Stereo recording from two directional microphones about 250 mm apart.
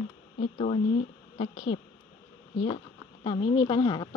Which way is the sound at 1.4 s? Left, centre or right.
Left.